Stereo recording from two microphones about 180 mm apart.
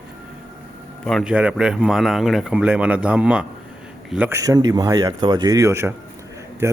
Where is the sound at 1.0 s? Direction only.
Centre (ahead or behind).